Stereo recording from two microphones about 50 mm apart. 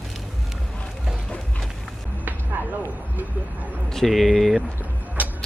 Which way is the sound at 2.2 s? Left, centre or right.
Right.